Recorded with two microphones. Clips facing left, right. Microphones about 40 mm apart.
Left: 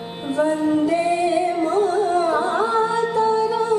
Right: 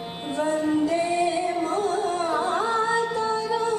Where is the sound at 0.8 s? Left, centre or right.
Left.